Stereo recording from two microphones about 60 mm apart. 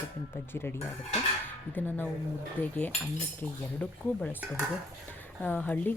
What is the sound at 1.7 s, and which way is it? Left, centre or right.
Speech, left.